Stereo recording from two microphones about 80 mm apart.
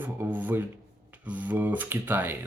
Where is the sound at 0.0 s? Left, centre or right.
Right.